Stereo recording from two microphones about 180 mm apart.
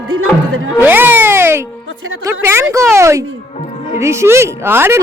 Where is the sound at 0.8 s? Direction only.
10° right (ahead or behind).